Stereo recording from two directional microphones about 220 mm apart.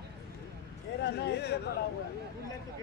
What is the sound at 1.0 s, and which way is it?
Speech, 50° left (ahead or behind).